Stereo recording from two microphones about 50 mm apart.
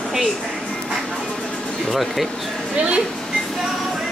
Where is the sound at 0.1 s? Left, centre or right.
Centre.